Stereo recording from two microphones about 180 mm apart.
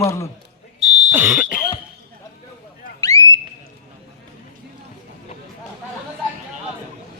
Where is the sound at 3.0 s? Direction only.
20° left (ahead or behind).